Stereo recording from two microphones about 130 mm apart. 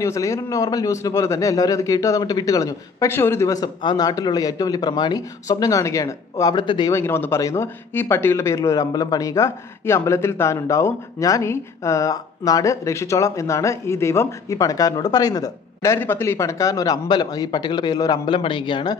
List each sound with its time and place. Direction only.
0.0 s speech: 25° left (ahead or behind)
6.5 s a man's voice: 35° left (ahead or behind)
6.9 s speech: 20° left (ahead or behind); by 18.9 s 40° left (ahead or behind)